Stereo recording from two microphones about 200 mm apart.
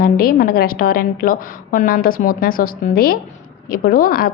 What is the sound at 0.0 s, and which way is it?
A woman's voice, 45° left (ahead or behind).